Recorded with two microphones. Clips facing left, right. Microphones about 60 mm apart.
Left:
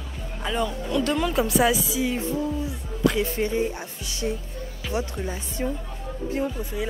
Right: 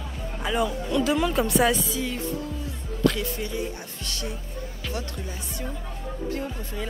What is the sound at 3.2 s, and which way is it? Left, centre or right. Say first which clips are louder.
Speech: left 6 dB; left.